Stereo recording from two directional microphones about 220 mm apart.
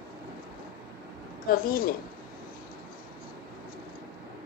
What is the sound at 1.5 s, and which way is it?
Speech, 40° left (ahead or behind).